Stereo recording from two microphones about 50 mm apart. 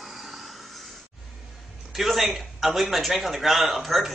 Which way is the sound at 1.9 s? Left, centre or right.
Centre.